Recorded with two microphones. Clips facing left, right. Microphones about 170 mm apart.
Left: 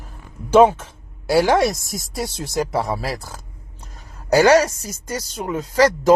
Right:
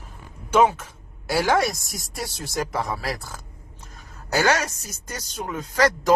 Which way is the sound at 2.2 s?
25° left (ahead or behind).